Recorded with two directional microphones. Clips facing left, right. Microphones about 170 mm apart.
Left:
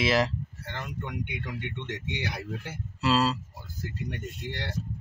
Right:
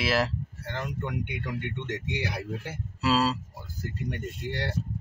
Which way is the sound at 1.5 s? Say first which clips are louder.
Right 3 dB; 5° right (ahead or behind).